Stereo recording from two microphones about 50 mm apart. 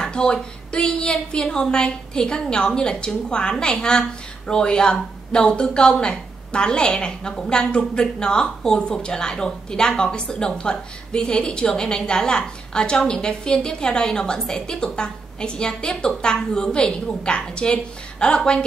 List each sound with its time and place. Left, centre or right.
0.0 s a woman's voice: centre